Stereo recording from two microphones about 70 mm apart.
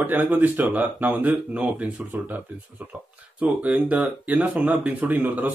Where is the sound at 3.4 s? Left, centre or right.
Right.